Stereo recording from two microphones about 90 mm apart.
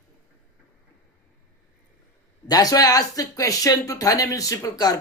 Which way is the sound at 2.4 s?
45° left (ahead or behind).